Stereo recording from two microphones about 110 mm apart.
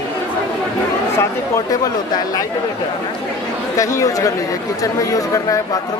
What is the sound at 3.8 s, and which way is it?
Speech, 30° left (ahead or behind).